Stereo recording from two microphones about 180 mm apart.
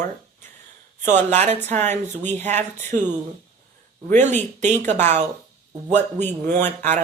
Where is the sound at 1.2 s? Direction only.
35° right (ahead or behind).